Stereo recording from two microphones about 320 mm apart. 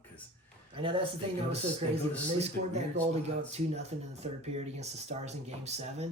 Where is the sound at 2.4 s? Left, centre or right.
Centre.